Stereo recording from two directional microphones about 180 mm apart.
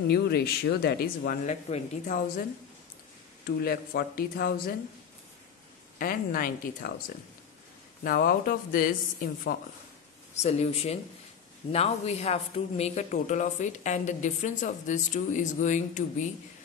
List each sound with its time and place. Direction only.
0.1 s speech: 60° left (ahead or behind)
1.4 s speech: 40° left (ahead or behind)
3.4 s speech: 55° left (ahead or behind)
5.9 s speech: 50° left (ahead or behind)
8.0 s speech: 55° left (ahead or behind)
10.3 s speech: 35° left (ahead or behind)